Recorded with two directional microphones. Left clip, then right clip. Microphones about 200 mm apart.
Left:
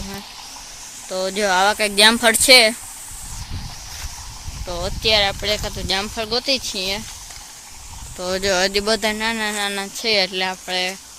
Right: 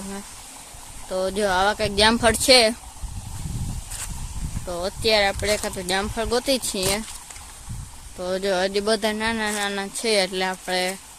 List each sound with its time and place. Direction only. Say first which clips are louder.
1.1 s speech: left 3 dB; centre (ahead or behind)
4.7 s speech: left 2 dB; 10° right (ahead or behind)
8.2 s speech: left 4 dB; centre (ahead or behind); by 10.9 s 20° right (ahead or behind)